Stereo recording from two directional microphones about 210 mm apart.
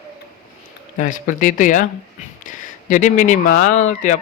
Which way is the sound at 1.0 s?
40° left (ahead or behind).